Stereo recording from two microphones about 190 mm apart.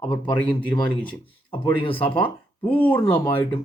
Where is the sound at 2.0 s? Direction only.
25° left (ahead or behind).